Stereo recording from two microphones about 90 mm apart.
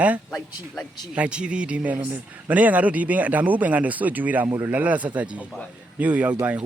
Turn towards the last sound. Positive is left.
turn(degrees=-15)  # may be behind; listen again after turning